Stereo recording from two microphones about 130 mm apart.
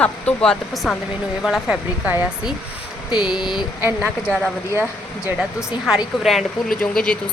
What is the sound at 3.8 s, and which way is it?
Speech, 15° right (ahead or behind).